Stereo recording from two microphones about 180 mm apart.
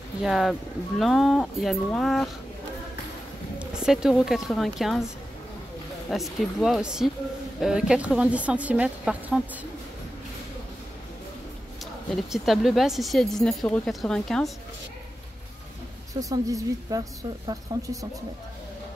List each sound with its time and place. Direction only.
0.2 s speech: centre (ahead or behind)
3.5 s a woman's voice: 5° right (ahead or behind)
6.0 s speech: centre (ahead or behind)
12.2 s speech: centre (ahead or behind)
16.1 s a woman's voice: 20° right (ahead or behind)